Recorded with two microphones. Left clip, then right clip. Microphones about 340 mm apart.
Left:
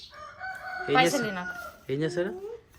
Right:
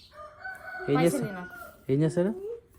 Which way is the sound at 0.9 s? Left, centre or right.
Centre.